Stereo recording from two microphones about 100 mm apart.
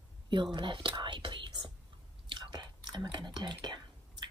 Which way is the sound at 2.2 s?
50° right (ahead or behind).